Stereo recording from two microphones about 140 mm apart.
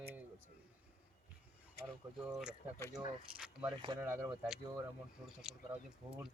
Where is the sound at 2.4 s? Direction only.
5° right (ahead or behind).